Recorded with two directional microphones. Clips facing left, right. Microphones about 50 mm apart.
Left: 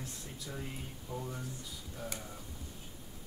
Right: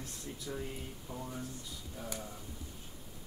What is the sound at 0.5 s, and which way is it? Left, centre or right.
Speech, centre.